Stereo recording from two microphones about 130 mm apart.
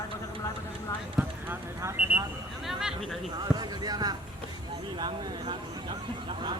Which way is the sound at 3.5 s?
30° right (ahead or behind).